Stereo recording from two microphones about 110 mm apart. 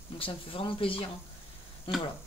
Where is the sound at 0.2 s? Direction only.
55° left (ahead or behind).